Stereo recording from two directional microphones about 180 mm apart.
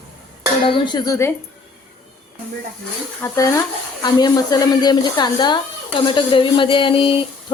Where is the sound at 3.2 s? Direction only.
15° left (ahead or behind).